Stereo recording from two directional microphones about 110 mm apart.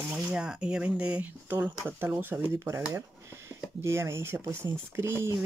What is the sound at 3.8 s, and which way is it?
Speech, 25° right (ahead or behind).